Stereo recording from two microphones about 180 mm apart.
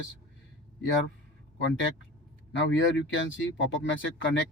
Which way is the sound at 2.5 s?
90° left.